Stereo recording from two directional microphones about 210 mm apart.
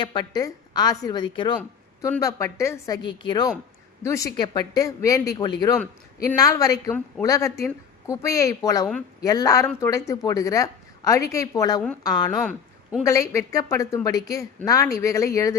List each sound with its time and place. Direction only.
0.0 s a woman's voice: 20° left (ahead or behind)
12.4 s a sound: centre (ahead or behind)
13.1 s a woman's voice: 15° left (ahead or behind)